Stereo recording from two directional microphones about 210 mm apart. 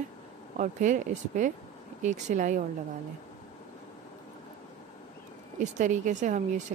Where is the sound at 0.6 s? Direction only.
35° right (ahead or behind).